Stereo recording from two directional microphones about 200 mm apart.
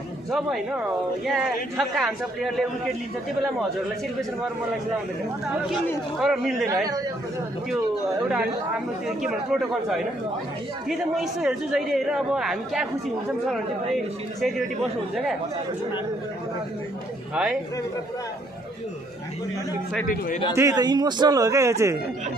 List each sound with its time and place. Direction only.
0.3 s speech: 5° right (ahead or behind)
5.5 s speech: centre (ahead or behind)
9.0 s speech: centre (ahead or behind)
20.1 s a man's voice: 40° left (ahead or behind)
20.5 s a man's voice: 20° right (ahead or behind)